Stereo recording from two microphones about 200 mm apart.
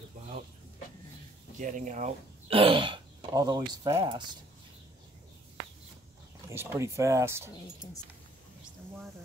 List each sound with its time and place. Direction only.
1.6 s speech: 40° right (ahead or behind); by 4.2 s 20° right (ahead or behind)
6.5 s speech: 10° right (ahead or behind)